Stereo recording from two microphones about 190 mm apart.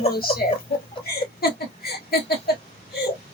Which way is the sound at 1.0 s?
55° left (ahead or behind).